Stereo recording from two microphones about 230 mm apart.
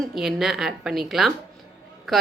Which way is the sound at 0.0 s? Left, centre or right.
Centre.